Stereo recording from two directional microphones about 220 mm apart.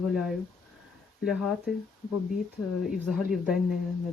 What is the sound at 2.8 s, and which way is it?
Speech, 5° right (ahead or behind).